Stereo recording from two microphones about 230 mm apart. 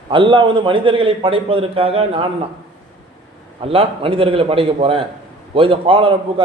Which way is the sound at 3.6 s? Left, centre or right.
Right.